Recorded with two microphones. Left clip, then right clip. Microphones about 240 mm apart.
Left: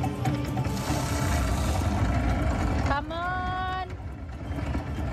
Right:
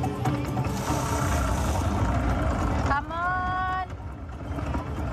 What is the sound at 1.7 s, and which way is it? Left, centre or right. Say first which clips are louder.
Vehicle: right 2 dB; centre.